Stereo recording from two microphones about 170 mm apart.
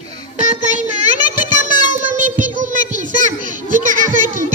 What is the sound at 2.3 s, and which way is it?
Child singing, 50° right (ahead or behind).